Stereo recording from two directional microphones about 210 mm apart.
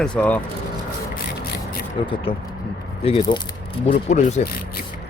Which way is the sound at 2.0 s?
25° left (ahead or behind).